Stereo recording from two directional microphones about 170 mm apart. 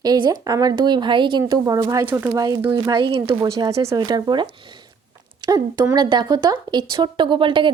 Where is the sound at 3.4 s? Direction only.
20° right (ahead or behind).